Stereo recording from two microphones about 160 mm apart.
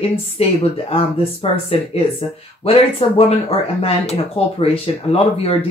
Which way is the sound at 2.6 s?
35° left (ahead or behind).